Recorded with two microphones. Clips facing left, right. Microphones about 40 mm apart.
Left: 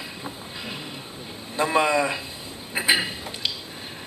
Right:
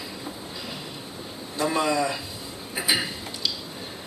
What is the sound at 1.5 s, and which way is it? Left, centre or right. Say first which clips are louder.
Speech: left 3 dB; left.